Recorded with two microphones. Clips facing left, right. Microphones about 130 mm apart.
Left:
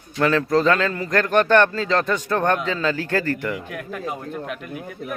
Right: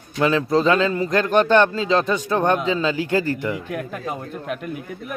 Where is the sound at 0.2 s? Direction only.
20° right (ahead or behind).